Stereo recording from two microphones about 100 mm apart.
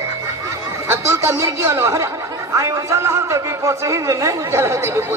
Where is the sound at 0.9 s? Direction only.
30° right (ahead or behind).